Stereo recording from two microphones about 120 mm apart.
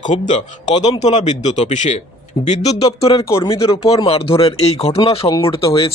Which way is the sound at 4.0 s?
50° left (ahead or behind).